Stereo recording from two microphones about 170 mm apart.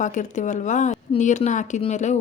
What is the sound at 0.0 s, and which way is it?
Speech, 45° left (ahead or behind).